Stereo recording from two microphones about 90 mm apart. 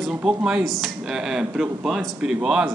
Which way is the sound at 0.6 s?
Centre (ahead or behind).